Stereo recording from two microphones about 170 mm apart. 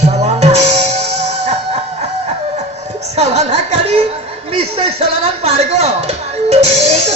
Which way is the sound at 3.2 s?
40° right (ahead or behind).